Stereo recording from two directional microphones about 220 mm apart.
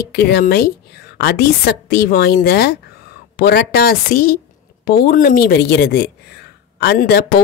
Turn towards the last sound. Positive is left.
turn(degrees=50)  # may be behind; listen again after turning